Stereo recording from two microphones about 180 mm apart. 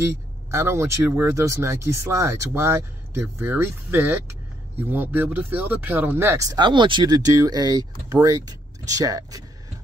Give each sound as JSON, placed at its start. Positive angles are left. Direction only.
{"t": 0.0, "sound": "speech", "side_deg": -15}